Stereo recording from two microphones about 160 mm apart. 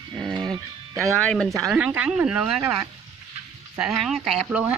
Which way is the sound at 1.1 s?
5° left (ahead or behind).